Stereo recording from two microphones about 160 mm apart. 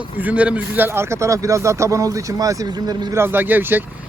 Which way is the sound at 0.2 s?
10° right (ahead or behind).